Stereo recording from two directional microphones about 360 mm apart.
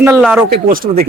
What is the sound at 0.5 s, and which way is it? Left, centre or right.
Speech, right.